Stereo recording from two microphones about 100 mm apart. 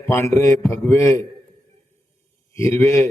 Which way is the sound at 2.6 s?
30° left (ahead or behind).